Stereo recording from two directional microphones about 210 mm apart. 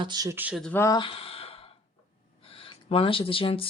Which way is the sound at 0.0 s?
20° right (ahead or behind).